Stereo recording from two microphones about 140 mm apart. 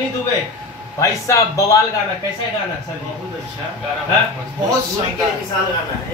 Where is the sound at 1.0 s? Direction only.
20° left (ahead or behind).